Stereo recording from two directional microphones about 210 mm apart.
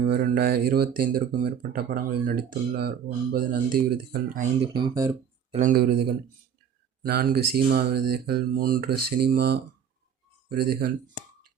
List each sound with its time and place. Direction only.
0.0 s speech: 50° right (ahead or behind)
4.6 s speech: 20° right (ahead or behind)
5.5 s speech: 40° right (ahead or behind)
7.0 s speech: 45° right (ahead or behind)